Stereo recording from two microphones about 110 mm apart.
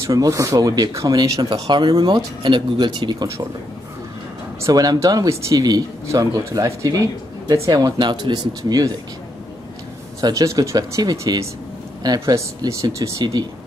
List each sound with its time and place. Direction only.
0.0 s speech: 30° right (ahead or behind)
1.5 s speech: 45° right (ahead or behind)
4.6 s speech: 30° right (ahead or behind)
10.2 s speech: 30° right (ahead or behind)